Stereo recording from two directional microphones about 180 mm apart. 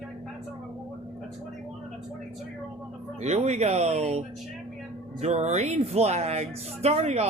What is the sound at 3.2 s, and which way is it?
Speech, 40° right (ahead or behind).